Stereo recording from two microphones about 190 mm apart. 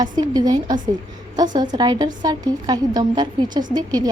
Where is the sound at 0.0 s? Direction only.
20° right (ahead or behind).